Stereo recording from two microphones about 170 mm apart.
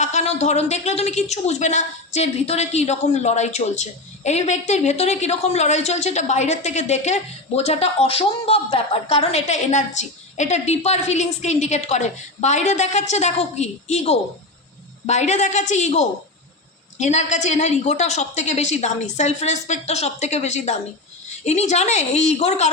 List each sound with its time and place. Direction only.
0.0 s a woman's voice: 40° left (ahead or behind)